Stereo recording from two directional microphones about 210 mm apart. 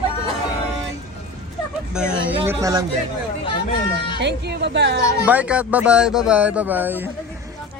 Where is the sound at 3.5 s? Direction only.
25° left (ahead or behind).